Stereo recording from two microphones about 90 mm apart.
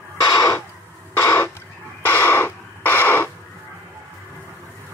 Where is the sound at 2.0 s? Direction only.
25° left (ahead or behind).